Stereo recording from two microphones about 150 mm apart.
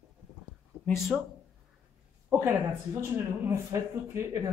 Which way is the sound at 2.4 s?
15° right (ahead or behind).